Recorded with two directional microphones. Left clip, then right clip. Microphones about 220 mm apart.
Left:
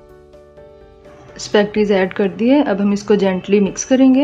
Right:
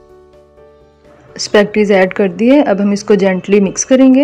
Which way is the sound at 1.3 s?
25° right (ahead or behind).